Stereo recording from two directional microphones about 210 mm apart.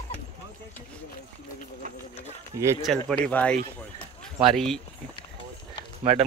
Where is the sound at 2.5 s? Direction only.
15° right (ahead or behind).